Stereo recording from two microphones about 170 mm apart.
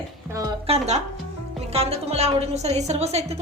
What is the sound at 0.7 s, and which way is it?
A woman's voice, 40° right (ahead or behind).